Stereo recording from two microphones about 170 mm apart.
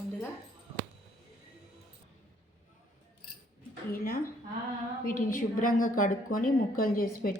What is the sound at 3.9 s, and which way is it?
A woman's voice, 60° left (ahead or behind).